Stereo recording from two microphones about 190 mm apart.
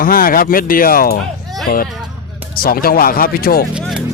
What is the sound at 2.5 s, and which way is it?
Speech, 50° left (ahead or behind).